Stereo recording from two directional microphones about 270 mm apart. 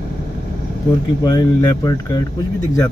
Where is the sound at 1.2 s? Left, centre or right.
Centre.